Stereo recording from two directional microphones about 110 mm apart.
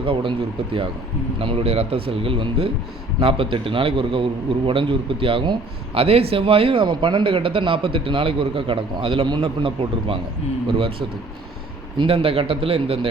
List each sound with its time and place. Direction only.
0.0 s a man's voice: 50° right (ahead or behind)
11.9 s speech: 55° right (ahead or behind)